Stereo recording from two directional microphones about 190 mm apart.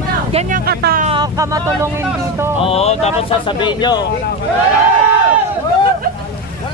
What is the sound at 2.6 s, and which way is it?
Speech, 30° left (ahead or behind).